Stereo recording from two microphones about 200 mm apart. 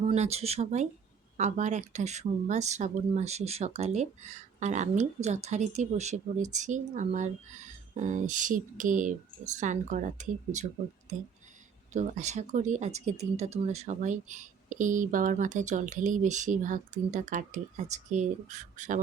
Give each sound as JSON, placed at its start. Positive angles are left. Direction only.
{"t": 0.0, "sound": "speech", "side_deg": -30}